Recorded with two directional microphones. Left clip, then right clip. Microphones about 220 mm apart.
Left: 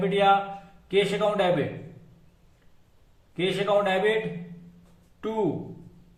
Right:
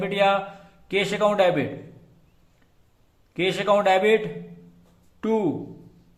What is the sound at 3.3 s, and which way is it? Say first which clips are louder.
Speech: right 3 dB; 45° right (ahead or behind).